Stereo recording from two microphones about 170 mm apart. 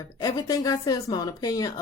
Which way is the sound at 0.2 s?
20° left (ahead or behind).